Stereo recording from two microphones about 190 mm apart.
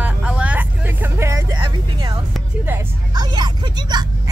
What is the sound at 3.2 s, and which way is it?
Speech, 20° right (ahead or behind).